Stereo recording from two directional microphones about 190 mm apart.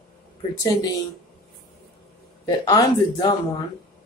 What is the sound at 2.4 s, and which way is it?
Speech, 20° left (ahead or behind).